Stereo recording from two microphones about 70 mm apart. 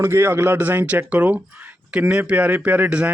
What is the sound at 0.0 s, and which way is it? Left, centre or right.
A man's voice, right.